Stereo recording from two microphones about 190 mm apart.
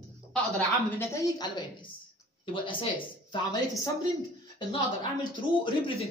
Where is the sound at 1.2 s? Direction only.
20° left (ahead or behind).